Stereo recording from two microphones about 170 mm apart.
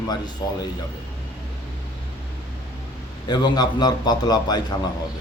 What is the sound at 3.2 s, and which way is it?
A man's voice, 25° left (ahead or behind).